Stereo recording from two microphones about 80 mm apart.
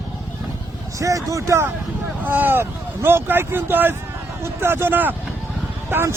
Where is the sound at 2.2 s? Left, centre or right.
Right.